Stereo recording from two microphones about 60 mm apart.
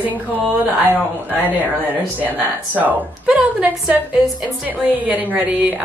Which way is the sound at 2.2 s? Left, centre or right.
Right.